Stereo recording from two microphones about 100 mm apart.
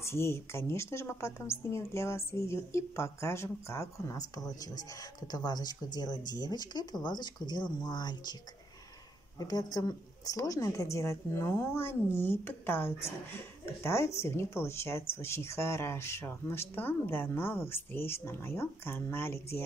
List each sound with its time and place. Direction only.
0.0 s a woman's voice: 25° left (ahead or behind); by 8.4 s 45° left (ahead or behind)
9.4 s a woman's voice: 40° left (ahead or behind); by 19.6 s 25° left (ahead or behind)